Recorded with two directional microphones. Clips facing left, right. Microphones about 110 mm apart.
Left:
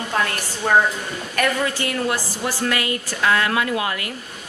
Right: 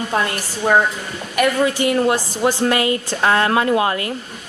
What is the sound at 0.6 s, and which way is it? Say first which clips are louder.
A woman's voice: right 2 dB; 15° right (ahead or behind).